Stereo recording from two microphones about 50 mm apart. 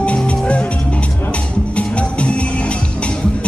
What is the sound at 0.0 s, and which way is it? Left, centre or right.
Music, left.